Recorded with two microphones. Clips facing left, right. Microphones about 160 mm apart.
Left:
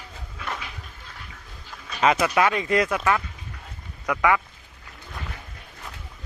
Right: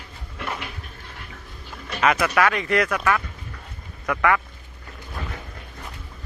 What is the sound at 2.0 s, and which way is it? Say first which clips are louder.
Speech: even; 20° left (ahead or behind).